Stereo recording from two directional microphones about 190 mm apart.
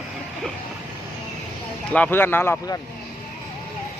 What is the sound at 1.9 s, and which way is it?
Speech, 10° left (ahead or behind).